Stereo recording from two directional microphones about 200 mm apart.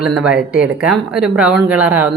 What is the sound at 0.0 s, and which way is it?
Speech, 5° right (ahead or behind).